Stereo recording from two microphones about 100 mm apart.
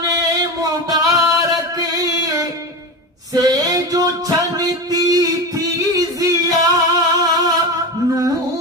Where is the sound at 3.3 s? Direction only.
40° right (ahead or behind).